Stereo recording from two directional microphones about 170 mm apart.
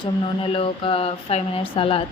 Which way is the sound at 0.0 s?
30° left (ahead or behind).